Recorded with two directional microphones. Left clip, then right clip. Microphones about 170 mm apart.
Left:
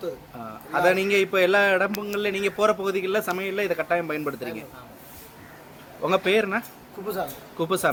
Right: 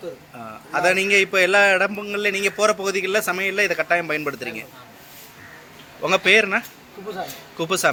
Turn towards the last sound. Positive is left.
turn(degrees=5)  # may be behind; listen again after turning